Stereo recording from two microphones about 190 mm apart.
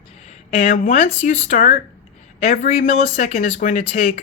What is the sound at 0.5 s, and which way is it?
Speech, 45° left (ahead or behind).